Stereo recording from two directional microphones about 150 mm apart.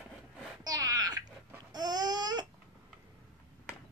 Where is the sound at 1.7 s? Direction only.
25° right (ahead or behind).